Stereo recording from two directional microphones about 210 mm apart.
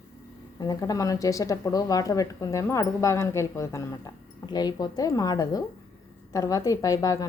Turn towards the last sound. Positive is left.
turn(degrees=15)  # may be behind; listen again after turning